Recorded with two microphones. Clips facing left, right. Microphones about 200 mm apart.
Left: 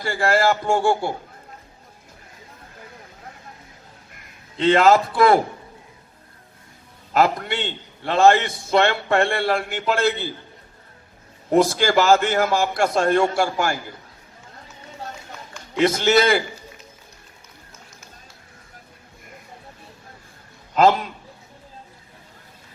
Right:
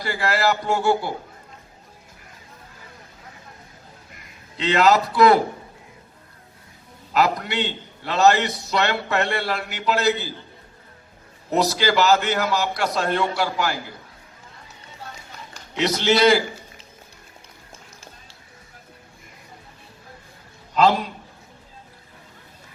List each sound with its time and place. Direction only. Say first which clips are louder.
0.0 s a man's voice: left 3 dB; 45° left (ahead or behind)
4.5 s a man's voice: left 3 dB; 50° left (ahead or behind)
7.1 s a man's voice: left 2 dB; 50° left (ahead or behind)
11.5 s a man's voice: left 3 dB; 50° left (ahead or behind)
15.8 s a man's voice: left 1 dB; 50° left (ahead or behind)